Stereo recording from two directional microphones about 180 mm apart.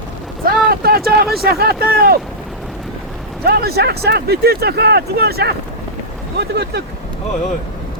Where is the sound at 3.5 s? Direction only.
60° right (ahead or behind).